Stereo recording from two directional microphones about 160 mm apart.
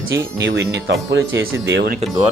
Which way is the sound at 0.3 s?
90° right.